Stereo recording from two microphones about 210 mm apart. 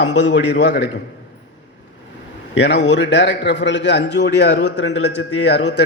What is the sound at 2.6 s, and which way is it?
A man's voice, 55° left (ahead or behind).